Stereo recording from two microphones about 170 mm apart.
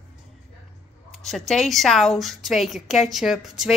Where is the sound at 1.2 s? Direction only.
Centre (ahead or behind).